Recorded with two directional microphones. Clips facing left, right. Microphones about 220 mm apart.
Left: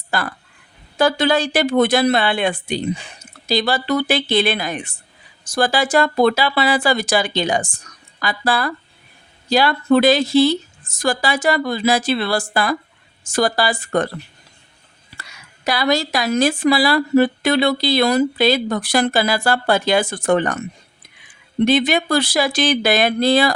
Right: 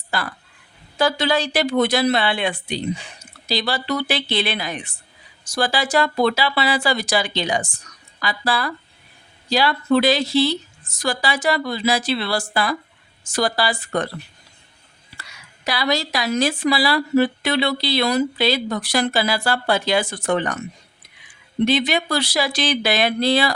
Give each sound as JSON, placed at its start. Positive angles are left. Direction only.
{"t": 0.1, "sound": "speech", "side_deg": 50}
{"t": 15.2, "sound": "speech", "side_deg": 50}
{"t": 21.6, "sound": "speech", "side_deg": 50}